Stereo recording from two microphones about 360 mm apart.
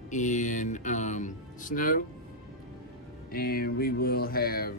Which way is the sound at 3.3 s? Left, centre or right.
Left.